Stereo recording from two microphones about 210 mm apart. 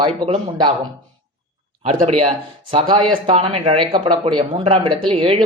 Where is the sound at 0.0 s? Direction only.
25° right (ahead or behind).